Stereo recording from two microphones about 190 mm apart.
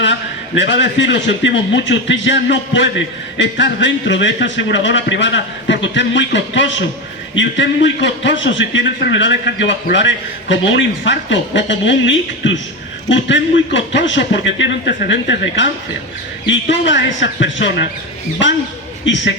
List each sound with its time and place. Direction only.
0.0 s a man's voice: 75° left (ahead or behind)
19.0 s a man's voice: 70° left (ahead or behind)